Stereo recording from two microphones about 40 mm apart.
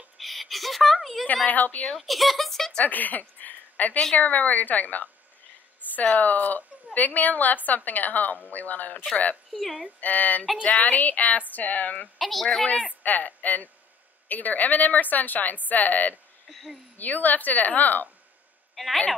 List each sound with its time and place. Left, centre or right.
0.2 s a sound: centre
1.2 s a woman's voice: left
2.0 s speech: centre
2.8 s a woman's voice: left
9.5 s speech: centre
9.9 s a woman's voice: left
12.2 s a sound: centre
12.6 s a woman's voice: left
16.4 s speech: centre
16.9 s a woman's voice: left